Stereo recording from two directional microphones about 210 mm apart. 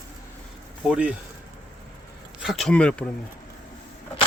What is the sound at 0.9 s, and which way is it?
Speech, 5° right (ahead or behind).